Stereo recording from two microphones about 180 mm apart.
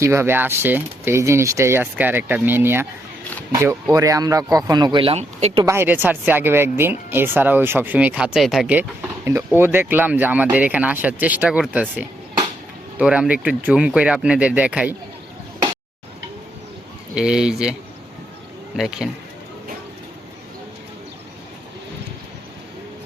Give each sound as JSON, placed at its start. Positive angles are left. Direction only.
{"t": 0.0, "sound": "speech", "side_deg": -15}
{"t": 5.6, "sound": "speech", "side_deg": -15}
{"t": 17.2, "sound": "speech", "side_deg": -5}
{"t": 18.8, "sound": "speech", "side_deg": -5}